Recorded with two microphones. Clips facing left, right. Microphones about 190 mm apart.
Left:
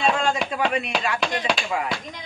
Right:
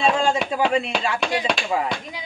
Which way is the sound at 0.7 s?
30° right (ahead or behind).